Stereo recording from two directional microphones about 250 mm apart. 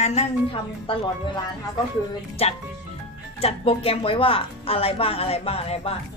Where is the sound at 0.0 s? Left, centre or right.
Left.